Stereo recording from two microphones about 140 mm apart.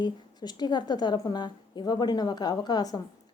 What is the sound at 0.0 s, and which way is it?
A woman's voice, 30° left (ahead or behind).